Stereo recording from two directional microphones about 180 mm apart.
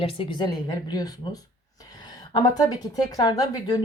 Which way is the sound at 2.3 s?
20° left (ahead or behind).